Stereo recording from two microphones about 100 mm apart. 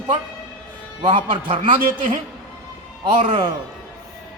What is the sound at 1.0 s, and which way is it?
Speech, 55° right (ahead or behind).